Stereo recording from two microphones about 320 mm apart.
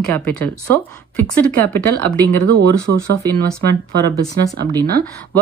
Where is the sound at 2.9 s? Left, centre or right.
Right.